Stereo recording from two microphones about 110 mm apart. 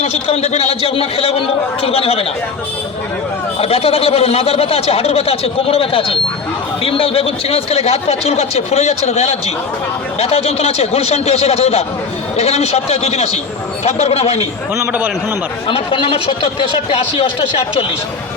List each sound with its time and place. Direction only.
0.0 s speech: 80° left; by 2.2 s 60° left (ahead or behind)
3.6 s speech: 60° left (ahead or behind); by 9.4 s 80° left
10.2 s speech: 70° left (ahead or behind)
15.6 s speech: 55° left (ahead or behind)